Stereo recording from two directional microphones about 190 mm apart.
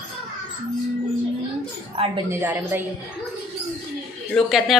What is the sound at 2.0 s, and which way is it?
Speech, 30° right (ahead or behind).